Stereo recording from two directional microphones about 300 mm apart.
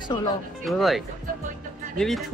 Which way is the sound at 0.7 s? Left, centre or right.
Centre.